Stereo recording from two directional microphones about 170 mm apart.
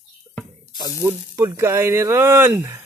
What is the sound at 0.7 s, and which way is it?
Speech, 20° right (ahead or behind).